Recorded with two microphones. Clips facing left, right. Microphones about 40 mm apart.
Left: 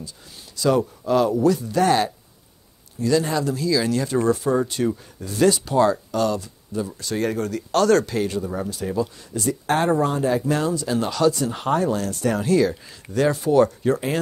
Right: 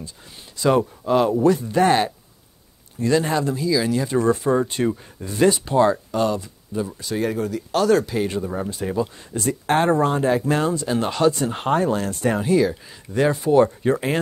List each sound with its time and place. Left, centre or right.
0.6 s speech: right
3.5 s speech: centre
4.3 s speech: right; by 8.3 s centre
8.6 s speech: right
12.4 s speech: centre
13.1 s speech: centre